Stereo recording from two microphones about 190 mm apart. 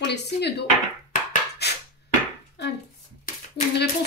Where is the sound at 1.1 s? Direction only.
50° left (ahead or behind).